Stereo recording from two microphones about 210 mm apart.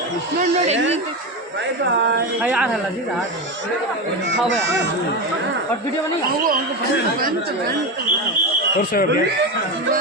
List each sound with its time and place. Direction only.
2.4 s speech: 5° right (ahead or behind)
8.8 s speech: 40° left (ahead or behind)